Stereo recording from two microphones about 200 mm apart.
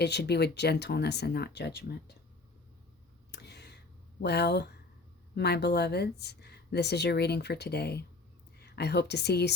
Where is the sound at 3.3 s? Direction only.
55° left (ahead or behind).